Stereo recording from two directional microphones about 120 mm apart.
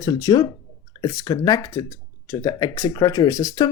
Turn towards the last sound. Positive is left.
turn(degrees=30)  # may be behind; listen again after turning